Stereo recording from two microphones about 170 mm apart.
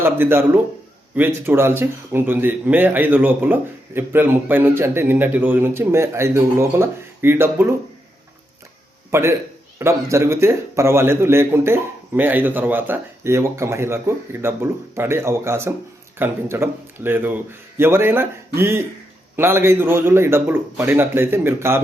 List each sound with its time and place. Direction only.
0.0 s speech: 15° right (ahead or behind)
9.0 s a man's voice: 15° right (ahead or behind)